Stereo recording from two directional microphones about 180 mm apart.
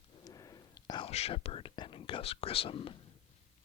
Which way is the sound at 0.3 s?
20° left (ahead or behind).